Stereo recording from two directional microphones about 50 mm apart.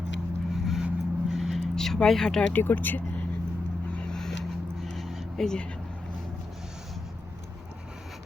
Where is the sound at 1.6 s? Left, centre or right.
Centre.